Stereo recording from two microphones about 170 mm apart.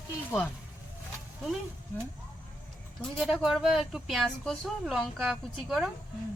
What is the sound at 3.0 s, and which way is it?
Speech, centre (ahead or behind).